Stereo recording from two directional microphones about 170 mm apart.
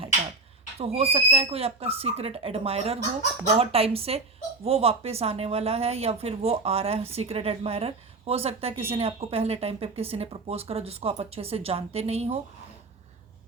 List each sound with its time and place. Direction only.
0.8 s speech: 35° right (ahead or behind)